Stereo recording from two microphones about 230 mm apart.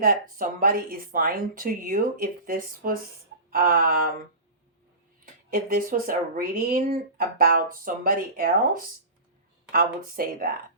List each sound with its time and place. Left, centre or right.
0.0 s speech: right
5.2 s speech: right